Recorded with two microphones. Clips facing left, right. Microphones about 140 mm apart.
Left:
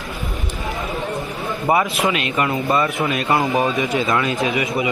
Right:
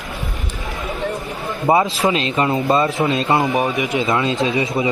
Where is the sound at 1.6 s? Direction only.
30° right (ahead or behind).